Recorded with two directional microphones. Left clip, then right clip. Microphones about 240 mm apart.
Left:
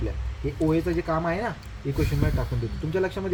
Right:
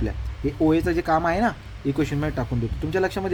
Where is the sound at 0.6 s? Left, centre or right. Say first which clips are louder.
Right 4 dB; right.